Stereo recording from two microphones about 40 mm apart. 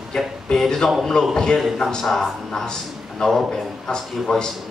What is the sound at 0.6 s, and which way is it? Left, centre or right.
Speech, centre.